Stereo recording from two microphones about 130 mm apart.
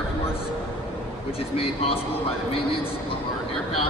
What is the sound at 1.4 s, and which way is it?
A man's voice, 45° left (ahead or behind).